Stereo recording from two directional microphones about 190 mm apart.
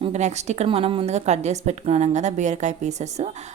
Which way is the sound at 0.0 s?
35° right (ahead or behind).